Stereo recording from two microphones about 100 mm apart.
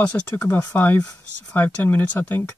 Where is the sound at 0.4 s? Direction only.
30° left (ahead or behind).